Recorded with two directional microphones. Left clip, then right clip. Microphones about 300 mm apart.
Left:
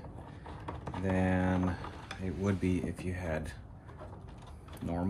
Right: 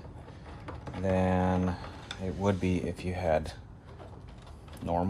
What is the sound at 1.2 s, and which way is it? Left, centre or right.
Speech, right.